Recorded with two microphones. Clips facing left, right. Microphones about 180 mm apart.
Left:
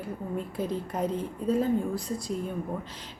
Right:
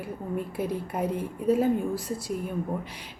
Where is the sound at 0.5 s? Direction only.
10° right (ahead or behind).